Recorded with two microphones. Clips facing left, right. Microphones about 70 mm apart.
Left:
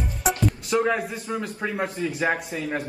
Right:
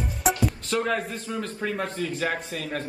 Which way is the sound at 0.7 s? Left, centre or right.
Left.